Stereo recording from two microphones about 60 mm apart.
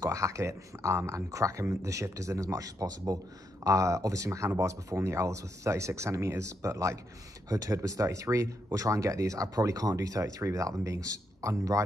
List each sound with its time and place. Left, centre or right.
0.0 s speech: right
3.6 s speech: right
7.4 s speech: right